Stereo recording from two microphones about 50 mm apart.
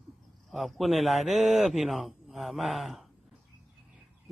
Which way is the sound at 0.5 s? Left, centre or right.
Centre.